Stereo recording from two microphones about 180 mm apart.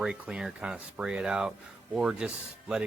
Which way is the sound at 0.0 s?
5° right (ahead or behind).